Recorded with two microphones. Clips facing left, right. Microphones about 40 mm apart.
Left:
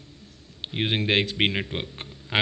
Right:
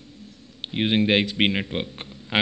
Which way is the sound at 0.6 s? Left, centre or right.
Centre.